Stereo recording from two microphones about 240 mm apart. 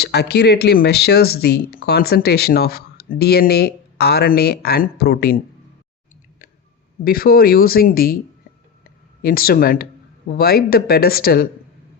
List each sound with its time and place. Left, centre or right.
0.0 s speech: left
7.0 s speech: left
8.8 s a sound: left
10.3 s speech: left